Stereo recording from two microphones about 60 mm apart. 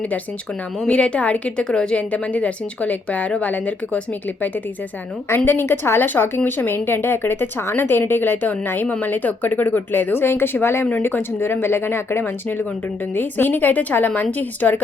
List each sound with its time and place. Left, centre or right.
0.9 s speech: centre
5.5 s speech: left
13.1 s speech: left